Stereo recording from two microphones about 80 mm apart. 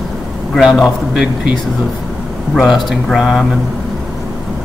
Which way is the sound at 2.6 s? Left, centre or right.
Centre.